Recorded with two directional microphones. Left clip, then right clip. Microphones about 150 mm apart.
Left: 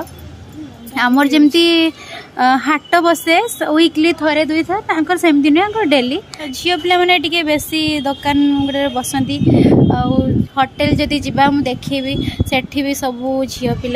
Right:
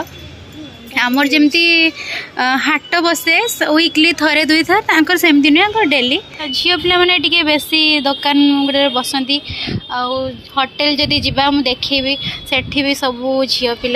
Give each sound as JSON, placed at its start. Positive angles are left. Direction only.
{"t": 0.9, "sound": "a woman's voice", "side_deg": 30}
{"t": 2.3, "sound": "a woman's voice", "side_deg": 15}
{"t": 8.4, "sound": "a woman's voice", "side_deg": 5}
{"t": 9.9, "sound": "a woman's voice", "side_deg": 30}